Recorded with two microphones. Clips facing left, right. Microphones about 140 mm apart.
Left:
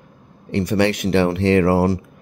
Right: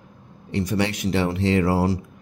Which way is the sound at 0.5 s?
65° left (ahead or behind).